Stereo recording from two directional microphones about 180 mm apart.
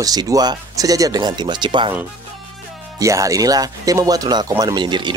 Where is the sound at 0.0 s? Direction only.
20° right (ahead or behind).